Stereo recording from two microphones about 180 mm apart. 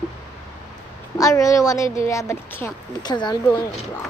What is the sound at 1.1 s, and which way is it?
Speech, 20° left (ahead or behind).